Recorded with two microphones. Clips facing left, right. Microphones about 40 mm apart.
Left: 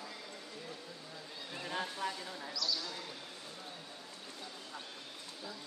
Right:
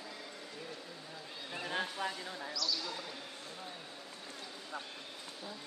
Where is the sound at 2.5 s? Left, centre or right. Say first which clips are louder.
Even; centre.